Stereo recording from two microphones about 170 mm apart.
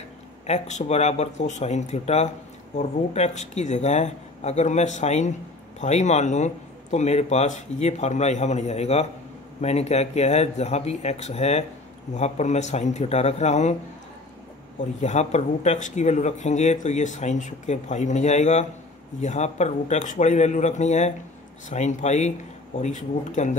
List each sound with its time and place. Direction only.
0.5 s speech: 40° left (ahead or behind)
15.0 s speech: 40° left (ahead or behind)